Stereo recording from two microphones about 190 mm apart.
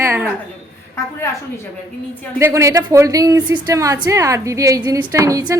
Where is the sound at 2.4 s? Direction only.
15° right (ahead or behind).